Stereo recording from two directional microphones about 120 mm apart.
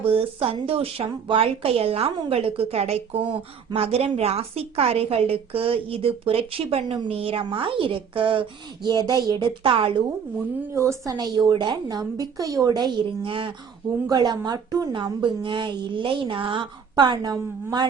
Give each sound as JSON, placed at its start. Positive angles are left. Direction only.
{"t": 0.0, "sound": "a woman's voice", "side_deg": -50}
{"t": 9.6, "sound": "a woman's voice", "side_deg": -50}
{"t": 10.8, "sound": "a woman's voice", "side_deg": -25}
{"t": 11.1, "sound": "speech", "side_deg": -35}
{"t": 14.1, "sound": "speech", "side_deg": -35}